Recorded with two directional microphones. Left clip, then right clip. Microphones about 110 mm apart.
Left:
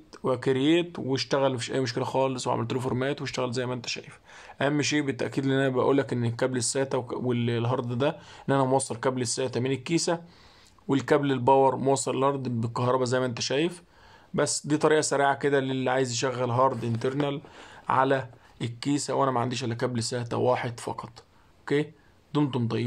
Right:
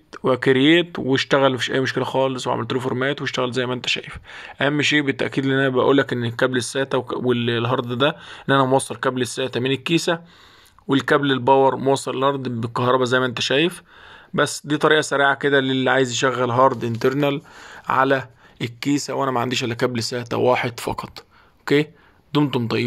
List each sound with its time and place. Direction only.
0.1 s speech: 30° right (ahead or behind)
3.8 s speech: 40° right (ahead or behind)
5.5 s speech: 15° right (ahead or behind); by 17.4 s 45° right (ahead or behind)
17.8 s speech: 30° right (ahead or behind)